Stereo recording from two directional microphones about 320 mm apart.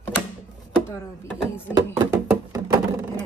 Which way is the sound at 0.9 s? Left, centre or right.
Centre.